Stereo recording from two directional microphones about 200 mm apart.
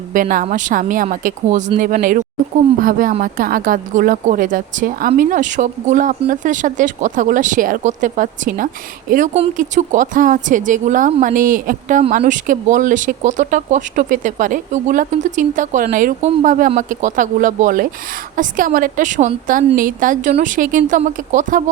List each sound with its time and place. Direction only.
0.1 s a woman's voice: 45° right (ahead or behind)